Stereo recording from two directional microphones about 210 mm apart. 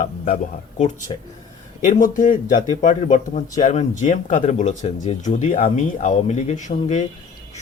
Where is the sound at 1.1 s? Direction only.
25° left (ahead or behind).